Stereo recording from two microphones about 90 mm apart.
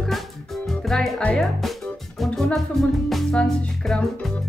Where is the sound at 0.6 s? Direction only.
5° left (ahead or behind).